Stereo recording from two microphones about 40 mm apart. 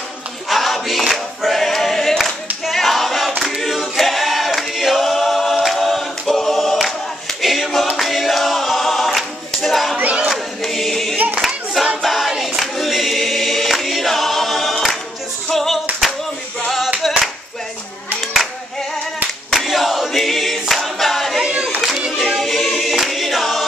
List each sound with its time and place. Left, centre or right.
0.5 s choir: centre
2.6 s a sound: centre
3.6 s choir: centre
10.6 s singing: centre
11.4 s hands: centre
12.0 s choir: centre
15.5 s music: centre
17.0 s clapping: centre
18.2 s clapping: centre
19.5 s choir: centre
21.4 s a sound: right
22.4 s a capella: centre